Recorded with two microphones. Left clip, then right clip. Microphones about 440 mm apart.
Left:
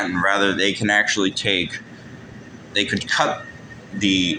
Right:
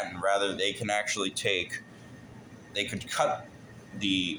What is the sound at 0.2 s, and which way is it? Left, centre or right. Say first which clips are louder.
Speech: left 8 dB; right.